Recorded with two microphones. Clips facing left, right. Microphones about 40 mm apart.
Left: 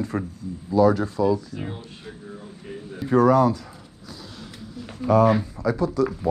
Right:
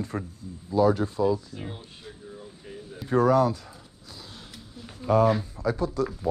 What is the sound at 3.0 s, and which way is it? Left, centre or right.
Speech, left.